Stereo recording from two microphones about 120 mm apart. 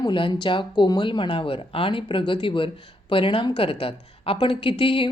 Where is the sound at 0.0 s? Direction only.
45° left (ahead or behind).